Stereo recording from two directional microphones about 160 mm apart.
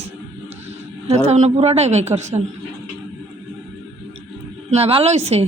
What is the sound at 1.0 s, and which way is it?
A woman's voice, 45° right (ahead or behind).